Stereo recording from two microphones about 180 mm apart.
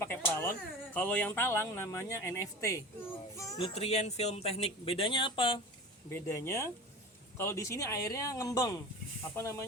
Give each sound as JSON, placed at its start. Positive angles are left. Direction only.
{"t": 0.0, "sound": "a sound", "side_deg": 15}
{"t": 0.9, "sound": "speech", "side_deg": 10}
{"t": 3.3, "sound": "music", "side_deg": 15}
{"t": 3.6, "sound": "speech", "side_deg": 35}
{"t": 6.1, "sound": "speech", "side_deg": 15}